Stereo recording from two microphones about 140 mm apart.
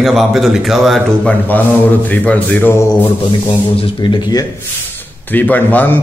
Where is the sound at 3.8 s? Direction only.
35° left (ahead or behind).